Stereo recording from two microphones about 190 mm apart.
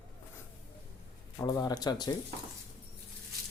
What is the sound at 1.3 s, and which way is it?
Speech, 20° left (ahead or behind).